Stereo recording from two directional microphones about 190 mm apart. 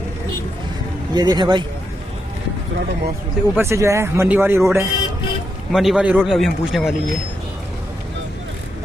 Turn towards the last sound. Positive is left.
turn(degrees=0)  # may be behind; listen again after turning